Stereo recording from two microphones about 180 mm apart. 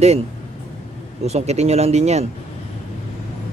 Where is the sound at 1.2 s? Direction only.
35° right (ahead or behind).